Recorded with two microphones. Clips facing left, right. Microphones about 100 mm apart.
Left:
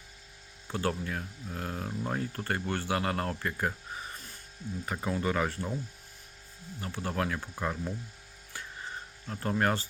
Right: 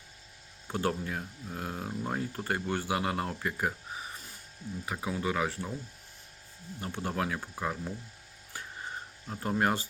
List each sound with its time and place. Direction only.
0.7 s speech: 20° right (ahead or behind); by 5.7 s centre (ahead or behind)
6.8 s speech: 20° right (ahead or behind)
9.2 s speech: 15° right (ahead or behind)